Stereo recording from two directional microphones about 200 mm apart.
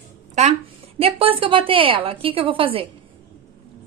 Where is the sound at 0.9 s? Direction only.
30° right (ahead or behind).